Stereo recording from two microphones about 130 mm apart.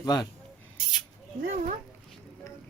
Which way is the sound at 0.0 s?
30° left (ahead or behind).